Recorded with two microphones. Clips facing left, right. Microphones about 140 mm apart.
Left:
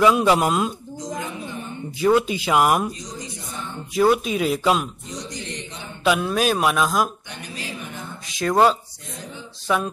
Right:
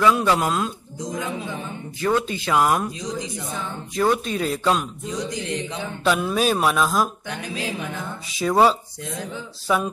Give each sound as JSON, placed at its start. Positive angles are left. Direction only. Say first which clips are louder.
{"t": 0.0, "sound": "speech", "louder": "left 2 dB", "side_deg": 15}
{"t": 2.0, "sound": "speech", "louder": "left 4 dB", "side_deg": 15}
{"t": 3.9, "sound": "speech", "louder": "left 3 dB", "side_deg": 10}
{"t": 6.0, "sound": "speech", "louder": "left 1 dB", "side_deg": 5}
{"t": 8.4, "sound": "speech", "louder": "even", "side_deg": -5}